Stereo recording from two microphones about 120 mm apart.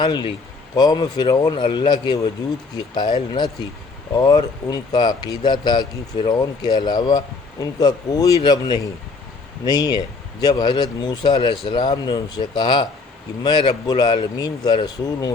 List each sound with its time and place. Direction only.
0.0 s speech: 40° left (ahead or behind)